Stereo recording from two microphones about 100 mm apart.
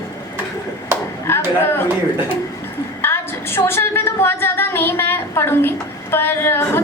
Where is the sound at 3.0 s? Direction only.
25° left (ahead or behind).